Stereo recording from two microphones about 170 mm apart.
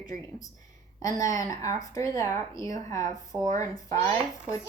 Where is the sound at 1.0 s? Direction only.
20° left (ahead or behind).